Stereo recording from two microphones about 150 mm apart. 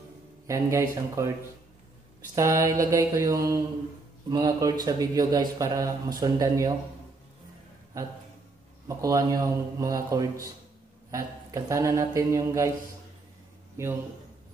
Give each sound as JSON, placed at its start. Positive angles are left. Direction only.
{"t": 0.5, "sound": "a man's voice", "side_deg": -20}
{"t": 2.3, "sound": "a man's voice", "side_deg": -20}
{"t": 8.8, "sound": "a man's voice", "side_deg": -25}